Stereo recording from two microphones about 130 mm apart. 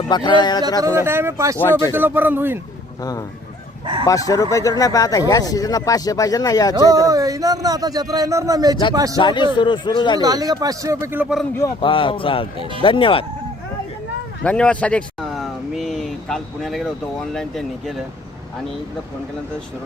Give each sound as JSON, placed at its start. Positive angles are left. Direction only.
{"t": 0.1, "sound": "a man's voice", "side_deg": 35}
{"t": 0.9, "sound": "speech", "side_deg": -20}
{"t": 3.0, "sound": "speech", "side_deg": 30}
{"t": 6.7, "sound": "speech", "side_deg": -25}
{"t": 9.1, "sound": "a man's voice", "side_deg": 35}
{"t": 10.2, "sound": "speech", "side_deg": -30}
{"t": 11.8, "sound": "speech", "side_deg": 40}
{"t": 14.4, "sound": "a man's voice", "side_deg": 10}
{"t": 15.3, "sound": "a sound", "side_deg": 0}
{"t": 17.3, "sound": "speech", "side_deg": 0}